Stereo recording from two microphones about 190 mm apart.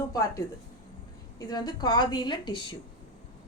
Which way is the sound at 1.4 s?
20° left (ahead or behind).